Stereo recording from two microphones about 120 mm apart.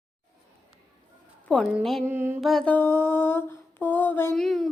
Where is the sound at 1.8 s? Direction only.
Centre (ahead or behind).